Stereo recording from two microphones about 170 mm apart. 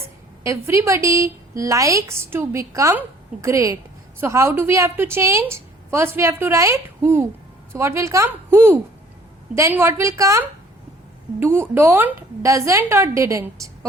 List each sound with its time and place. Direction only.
0.4 s a woman's voice: 15° right (ahead or behind)